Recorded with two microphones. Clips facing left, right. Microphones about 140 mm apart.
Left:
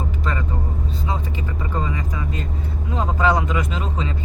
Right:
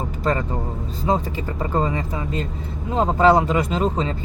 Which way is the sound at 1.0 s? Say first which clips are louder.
Right 8 dB; 40° right (ahead or behind).